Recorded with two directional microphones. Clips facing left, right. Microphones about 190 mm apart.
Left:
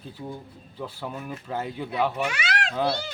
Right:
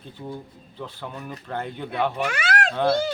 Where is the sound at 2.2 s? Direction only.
50° right (ahead or behind).